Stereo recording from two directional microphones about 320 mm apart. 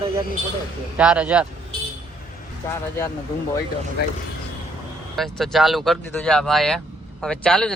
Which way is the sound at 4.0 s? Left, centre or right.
Left.